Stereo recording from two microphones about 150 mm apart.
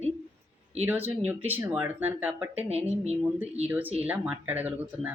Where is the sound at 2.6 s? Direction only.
45° right (ahead or behind).